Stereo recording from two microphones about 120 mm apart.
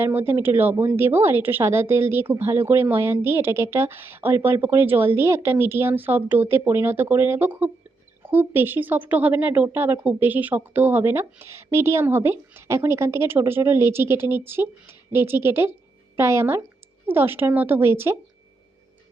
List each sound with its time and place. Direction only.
0.0 s a woman's voice: 15° right (ahead or behind)